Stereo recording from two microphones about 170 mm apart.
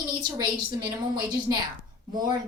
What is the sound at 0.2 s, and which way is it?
A woman's voice, 25° right (ahead or behind).